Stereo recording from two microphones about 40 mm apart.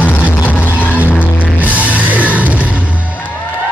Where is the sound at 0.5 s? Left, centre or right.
Left.